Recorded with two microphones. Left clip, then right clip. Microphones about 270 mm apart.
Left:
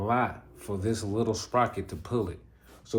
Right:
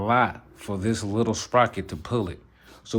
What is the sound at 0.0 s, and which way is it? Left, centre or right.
Speech, right.